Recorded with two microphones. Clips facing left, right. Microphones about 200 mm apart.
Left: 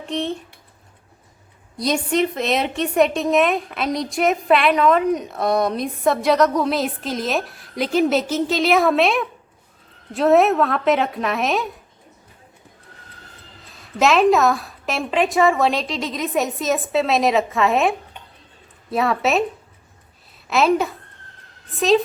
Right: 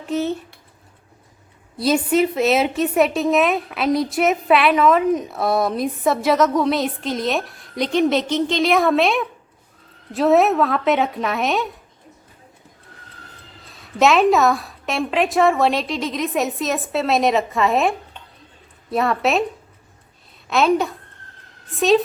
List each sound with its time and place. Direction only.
0.0 s speech: 5° right (ahead or behind)
1.7 s a woman's voice: 5° right (ahead or behind)
13.7 s a woman's voice: centre (ahead or behind)
20.5 s a woman's voice: centre (ahead or behind)